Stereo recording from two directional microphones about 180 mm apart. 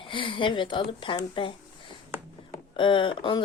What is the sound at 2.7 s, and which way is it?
Speech, 25° left (ahead or behind).